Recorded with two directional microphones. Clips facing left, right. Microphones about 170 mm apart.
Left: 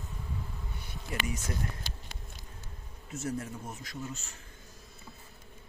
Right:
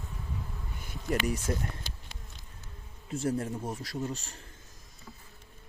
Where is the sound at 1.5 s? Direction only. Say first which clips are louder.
Right 5 dB; 35° right (ahead or behind).